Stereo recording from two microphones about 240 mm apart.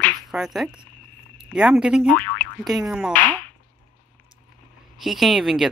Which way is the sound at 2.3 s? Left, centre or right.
Centre.